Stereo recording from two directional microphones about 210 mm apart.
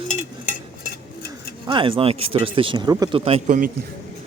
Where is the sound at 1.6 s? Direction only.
25° right (ahead or behind).